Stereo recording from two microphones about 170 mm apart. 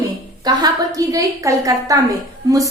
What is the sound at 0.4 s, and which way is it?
A woman's voice, 20° right (ahead or behind).